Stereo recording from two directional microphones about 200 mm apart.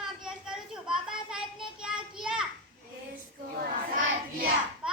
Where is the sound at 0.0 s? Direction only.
Centre (ahead or behind).